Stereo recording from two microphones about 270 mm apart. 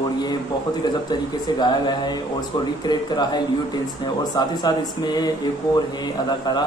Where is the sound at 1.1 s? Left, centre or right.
Centre.